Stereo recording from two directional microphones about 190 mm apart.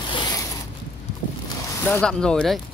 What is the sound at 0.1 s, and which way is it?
Zipper, 25° left (ahead or behind).